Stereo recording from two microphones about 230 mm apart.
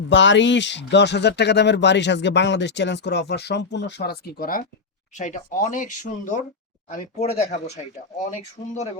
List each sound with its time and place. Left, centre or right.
0.1 s speech: left